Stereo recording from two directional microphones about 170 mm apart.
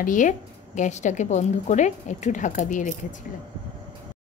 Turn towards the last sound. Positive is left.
turn(degrees=50)  # may be behind; listen again after turning